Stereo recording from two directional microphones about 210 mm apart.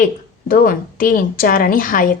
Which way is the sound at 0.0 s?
45° left (ahead or behind).